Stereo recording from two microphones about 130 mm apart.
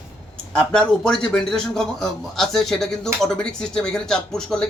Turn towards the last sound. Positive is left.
turn(degrees=5)  # may be behind; listen again after turning